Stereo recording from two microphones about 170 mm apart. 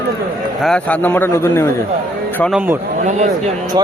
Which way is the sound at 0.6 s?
5° left (ahead or behind).